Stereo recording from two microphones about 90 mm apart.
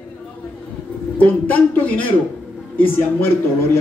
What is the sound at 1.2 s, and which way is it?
Speech, 20° left (ahead or behind).